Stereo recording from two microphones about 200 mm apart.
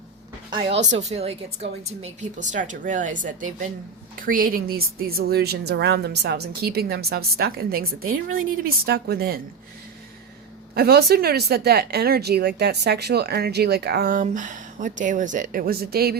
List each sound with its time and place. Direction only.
0.5 s a woman's voice: 30° right (ahead or behind); by 9.4 s 50° right (ahead or behind)
10.8 s speech: 50° right (ahead or behind)